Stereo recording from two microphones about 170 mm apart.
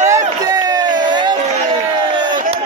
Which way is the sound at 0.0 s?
20° right (ahead or behind).